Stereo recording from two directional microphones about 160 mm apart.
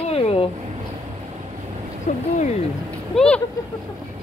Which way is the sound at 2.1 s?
50° left (ahead or behind).